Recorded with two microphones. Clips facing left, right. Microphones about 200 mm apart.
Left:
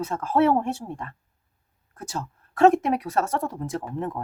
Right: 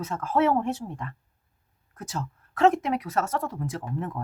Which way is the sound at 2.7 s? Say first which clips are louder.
Left 4 dB; 30° left (ahead or behind).